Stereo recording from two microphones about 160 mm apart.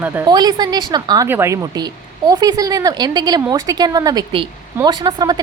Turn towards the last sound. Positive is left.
turn(degrees=-25)  # may be behind; listen again after turning